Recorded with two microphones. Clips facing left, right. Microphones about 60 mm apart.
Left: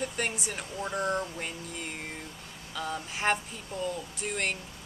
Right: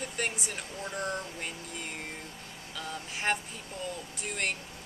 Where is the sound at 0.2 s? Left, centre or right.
Centre.